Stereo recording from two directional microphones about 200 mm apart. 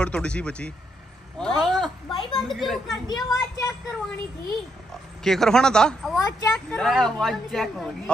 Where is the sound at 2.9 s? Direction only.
20° left (ahead or behind).